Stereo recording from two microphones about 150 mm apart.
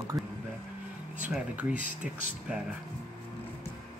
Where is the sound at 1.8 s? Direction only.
55° right (ahead or behind).